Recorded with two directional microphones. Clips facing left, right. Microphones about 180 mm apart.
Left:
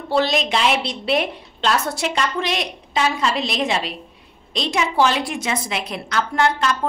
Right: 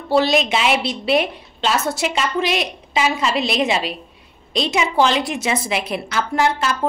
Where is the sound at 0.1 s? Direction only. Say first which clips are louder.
Right 3 dB; 5° right (ahead or behind).